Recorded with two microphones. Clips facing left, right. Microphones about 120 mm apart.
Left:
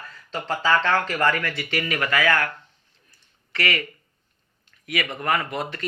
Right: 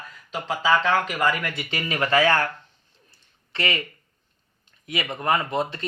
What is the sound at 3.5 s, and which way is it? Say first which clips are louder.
Speech: left 1 dB; 25° right (ahead or behind).